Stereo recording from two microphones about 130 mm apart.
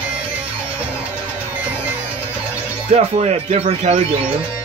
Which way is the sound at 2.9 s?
55° right (ahead or behind).